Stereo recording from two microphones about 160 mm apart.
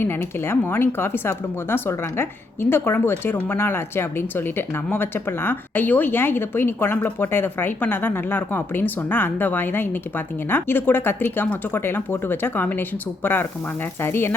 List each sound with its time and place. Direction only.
0.0 s speech: 15° left (ahead or behind)